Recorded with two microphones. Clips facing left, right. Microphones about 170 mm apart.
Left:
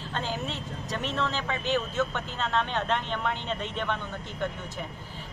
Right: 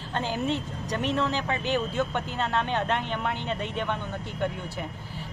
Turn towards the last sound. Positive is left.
turn(degrees=-15)  # may be behind; listen again after turning